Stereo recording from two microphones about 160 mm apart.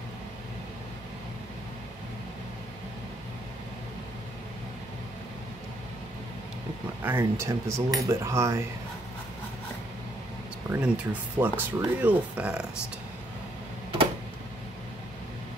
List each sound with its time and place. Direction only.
7.0 s speech: 15° right (ahead or behind)
10.7 s speech: 10° right (ahead or behind)